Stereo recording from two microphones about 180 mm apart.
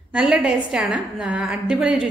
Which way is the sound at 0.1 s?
5° right (ahead or behind).